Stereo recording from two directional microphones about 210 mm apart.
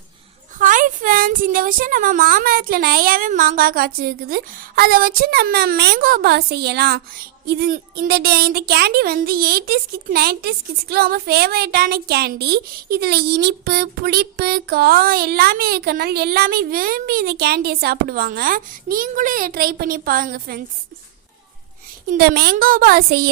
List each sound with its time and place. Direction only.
0.6 s speech: 40° right (ahead or behind)
22.1 s speech: 50° right (ahead or behind)